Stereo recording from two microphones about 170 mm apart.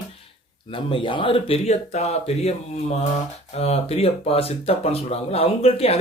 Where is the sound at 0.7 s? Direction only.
30° left (ahead or behind).